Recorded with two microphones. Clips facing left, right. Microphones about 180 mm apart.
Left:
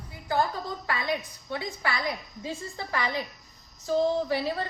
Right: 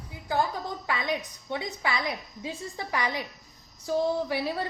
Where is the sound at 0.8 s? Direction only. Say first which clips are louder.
Even; 15° right (ahead or behind).